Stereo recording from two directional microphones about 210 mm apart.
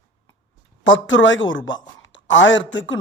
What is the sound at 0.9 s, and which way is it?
Speech, 65° left (ahead or behind).